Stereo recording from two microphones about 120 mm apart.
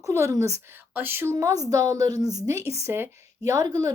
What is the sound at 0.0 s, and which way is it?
Speech, 25° right (ahead or behind).